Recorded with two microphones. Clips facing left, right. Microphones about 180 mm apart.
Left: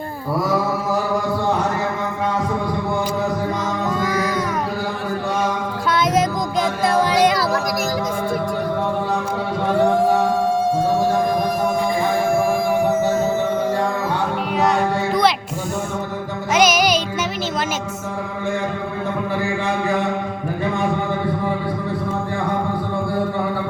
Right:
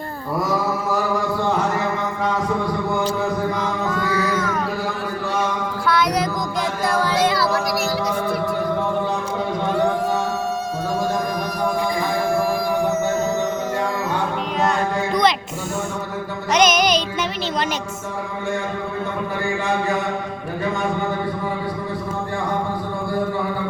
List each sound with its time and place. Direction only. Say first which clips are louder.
4.0 s a sound: even; 15° left (ahead or behind)
5.9 s child singing: left 2 dB; 20° left (ahead or behind)
14.6 s music: left 2 dB; 5° left (ahead or behind)
16.5 s music: left 1 dB; 5° left (ahead or behind)